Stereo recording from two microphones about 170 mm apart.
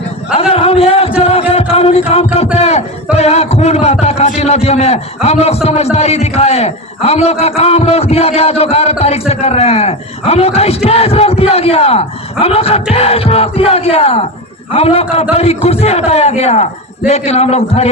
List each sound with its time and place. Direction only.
0.5 s a sound: 35° left (ahead or behind)
1.2 s music: 35° left (ahead or behind)
1.7 s a man's voice: 35° left (ahead or behind)